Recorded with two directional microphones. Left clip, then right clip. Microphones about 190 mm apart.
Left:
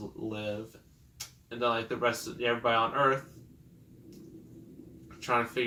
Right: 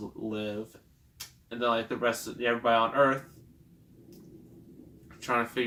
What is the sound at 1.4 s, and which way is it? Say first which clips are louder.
Speech: right 1 dB; 10° right (ahead or behind).